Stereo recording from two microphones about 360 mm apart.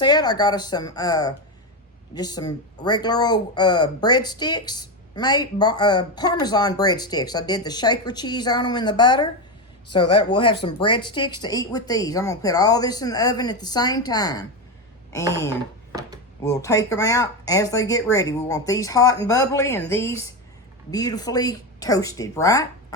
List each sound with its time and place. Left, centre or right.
0.0 s speech: centre
11.2 s speech: left
11.4 s speech: centre
16.4 s speech: centre